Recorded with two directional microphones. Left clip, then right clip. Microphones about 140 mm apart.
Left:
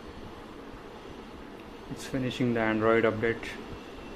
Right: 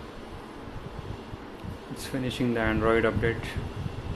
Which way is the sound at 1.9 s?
20° left (ahead or behind).